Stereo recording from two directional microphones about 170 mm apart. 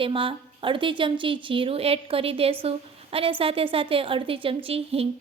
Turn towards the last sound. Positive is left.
turn(degrees=-35)  # may be behind; listen again after turning